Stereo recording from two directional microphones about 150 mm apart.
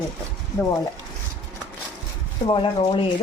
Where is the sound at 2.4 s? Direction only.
35° left (ahead or behind).